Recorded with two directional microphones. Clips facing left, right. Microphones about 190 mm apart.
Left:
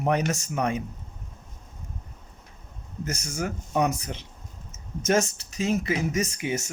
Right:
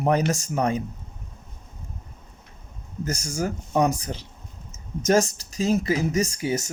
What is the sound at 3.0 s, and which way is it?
Speech, 35° right (ahead or behind).